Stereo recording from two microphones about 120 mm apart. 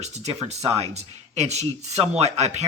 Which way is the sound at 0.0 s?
65° right (ahead or behind).